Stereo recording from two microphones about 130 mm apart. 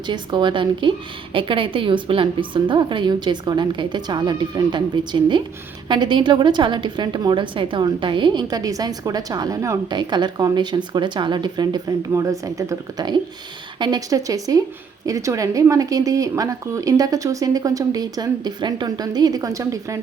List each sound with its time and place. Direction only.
0.1 s a woman's voice: 35° right (ahead or behind)
9.9 s a woman's voice: 35° right (ahead or behind)